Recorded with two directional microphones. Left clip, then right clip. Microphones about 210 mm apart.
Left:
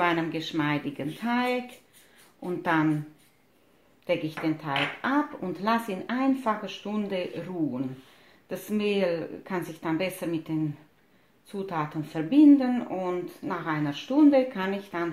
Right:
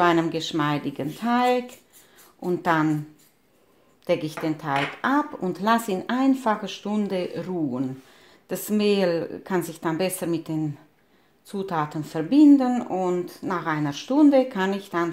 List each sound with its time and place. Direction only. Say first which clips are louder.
0.0 s speech: right 5 dB; 40° right (ahead or behind)
4.0 s a woman's voice: right 3 dB; 40° right (ahead or behind)